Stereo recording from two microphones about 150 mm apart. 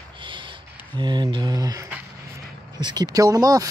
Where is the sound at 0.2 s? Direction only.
35° right (ahead or behind).